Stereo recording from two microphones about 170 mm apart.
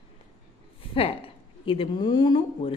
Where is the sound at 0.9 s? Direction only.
35° left (ahead or behind).